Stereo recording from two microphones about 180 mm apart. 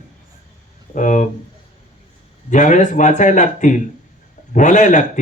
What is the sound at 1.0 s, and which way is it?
Speech, 45° left (ahead or behind).